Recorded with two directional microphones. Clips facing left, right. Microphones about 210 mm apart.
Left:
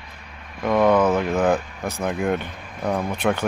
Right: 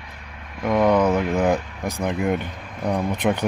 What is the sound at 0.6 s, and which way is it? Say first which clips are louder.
Speech: left 1 dB; 10° right (ahead or behind).